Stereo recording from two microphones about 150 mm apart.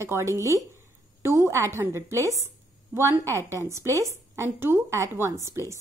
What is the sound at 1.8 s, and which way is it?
A woman's voice, 20° right (ahead or behind).